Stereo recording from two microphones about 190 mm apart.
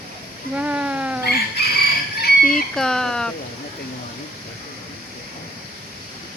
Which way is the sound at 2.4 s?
Centre (ahead or behind).